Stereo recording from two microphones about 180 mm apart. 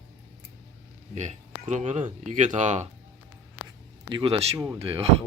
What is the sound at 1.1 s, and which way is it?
A man's voice, 40° right (ahead or behind).